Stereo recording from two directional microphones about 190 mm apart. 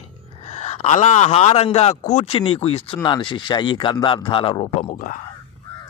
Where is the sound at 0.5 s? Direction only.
35° left (ahead or behind).